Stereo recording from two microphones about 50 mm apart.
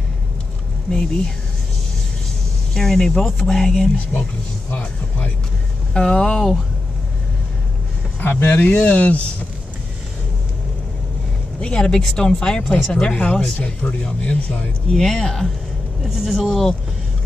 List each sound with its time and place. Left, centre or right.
0.8 s speech: centre
2.7 s speech: centre
4.1 s speech: left
5.9 s speech: centre
8.2 s speech: left
11.6 s speech: centre
14.9 s speech: centre